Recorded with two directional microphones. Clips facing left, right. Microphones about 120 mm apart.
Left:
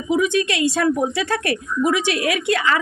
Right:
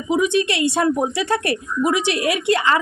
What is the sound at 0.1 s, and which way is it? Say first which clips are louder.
Speech: right 1 dB; 25° right (ahead or behind).